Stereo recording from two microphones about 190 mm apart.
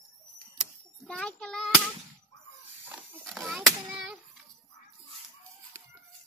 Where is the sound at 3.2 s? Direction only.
Centre (ahead or behind).